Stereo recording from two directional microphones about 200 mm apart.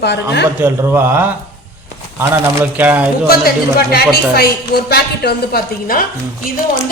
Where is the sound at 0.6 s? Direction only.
10° right (ahead or behind).